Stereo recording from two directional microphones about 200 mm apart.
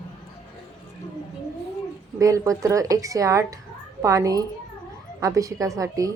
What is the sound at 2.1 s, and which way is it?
Speech, 15° right (ahead or behind).